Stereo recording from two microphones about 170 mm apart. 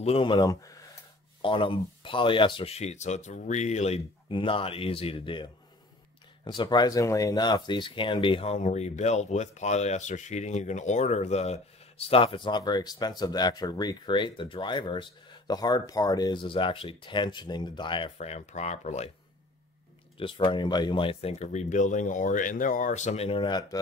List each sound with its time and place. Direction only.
0.0 s speech: 30° left (ahead or behind)
1.4 s speech: 30° left (ahead or behind)
20.2 s speech: 30° left (ahead or behind)